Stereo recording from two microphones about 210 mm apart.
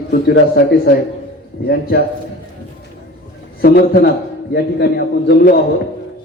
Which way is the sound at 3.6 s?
50° left (ahead or behind).